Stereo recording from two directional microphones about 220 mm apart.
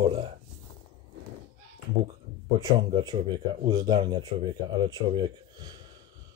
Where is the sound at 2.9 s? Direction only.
20° right (ahead or behind).